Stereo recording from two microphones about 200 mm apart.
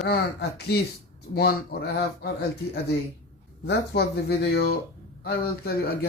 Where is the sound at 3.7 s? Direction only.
55° left (ahead or behind).